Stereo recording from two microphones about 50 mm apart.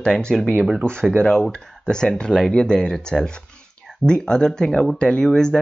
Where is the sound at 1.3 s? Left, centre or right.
Centre.